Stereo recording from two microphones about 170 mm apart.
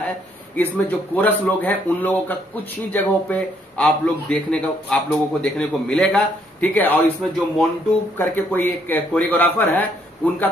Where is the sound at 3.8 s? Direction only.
5° left (ahead or behind).